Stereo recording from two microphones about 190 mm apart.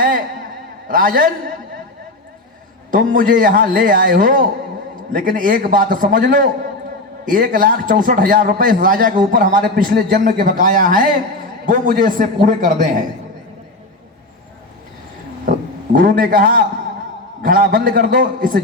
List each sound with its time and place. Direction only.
0.9 s a man's voice: 45° right (ahead or behind)
2.9 s a man's voice: 45° right (ahead or behind)
15.4 s a man's voice: 45° right (ahead or behind)